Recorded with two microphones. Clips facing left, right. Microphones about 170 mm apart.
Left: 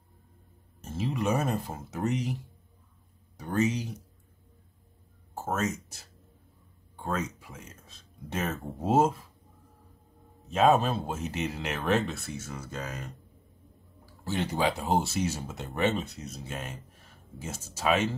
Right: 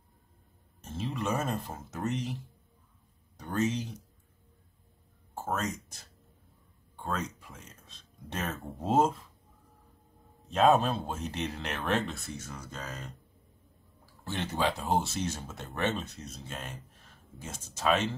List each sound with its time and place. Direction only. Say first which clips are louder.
0.7 s speech: left 4 dB; 5° left (ahead or behind)
3.3 s speech: left 3 dB; 10° left (ahead or behind)
5.3 s speech: left 3 dB; 5° left (ahead or behind)
10.5 s speech: left 1 dB; centre (ahead or behind)
14.2 s speech: left 3 dB; 10° left (ahead or behind)